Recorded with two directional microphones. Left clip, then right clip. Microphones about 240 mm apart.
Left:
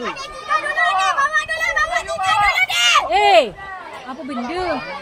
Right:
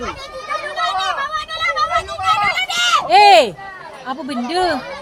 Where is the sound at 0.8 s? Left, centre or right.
Right.